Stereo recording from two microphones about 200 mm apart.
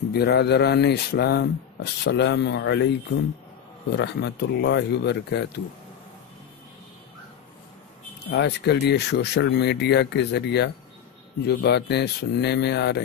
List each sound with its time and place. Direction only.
0.1 s speech: 55° left (ahead or behind)
3.9 s speech: 55° left (ahead or behind)
8.3 s speech: 55° left (ahead or behind)